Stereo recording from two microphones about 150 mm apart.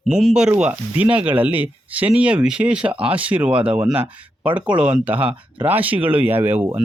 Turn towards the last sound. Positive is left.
turn(degrees=-15)  # may be behind; listen again after turning